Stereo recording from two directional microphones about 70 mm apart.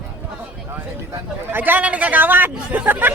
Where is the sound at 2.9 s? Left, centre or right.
Right.